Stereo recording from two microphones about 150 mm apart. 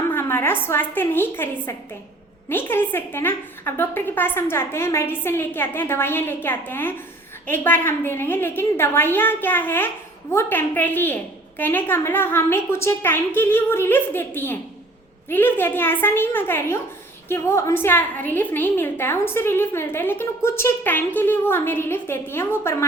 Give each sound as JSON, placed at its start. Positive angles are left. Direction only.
{"t": 0.1, "sound": "a woman's voice", "side_deg": 15}